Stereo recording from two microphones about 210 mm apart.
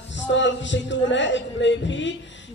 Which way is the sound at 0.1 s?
60° left (ahead or behind).